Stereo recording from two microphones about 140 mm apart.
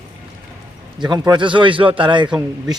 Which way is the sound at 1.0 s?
30° right (ahead or behind).